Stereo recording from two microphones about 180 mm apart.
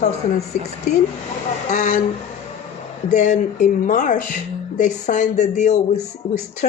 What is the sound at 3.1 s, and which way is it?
A woman's voice, 40° left (ahead or behind).